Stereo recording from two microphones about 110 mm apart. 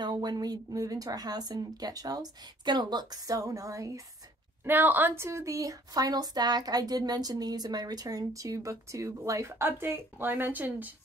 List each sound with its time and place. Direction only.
0.0 s speech: 40° right (ahead or behind)
4.6 s a woman's voice: 15° right (ahead or behind)